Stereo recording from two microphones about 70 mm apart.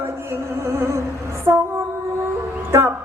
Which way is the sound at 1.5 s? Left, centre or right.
Right.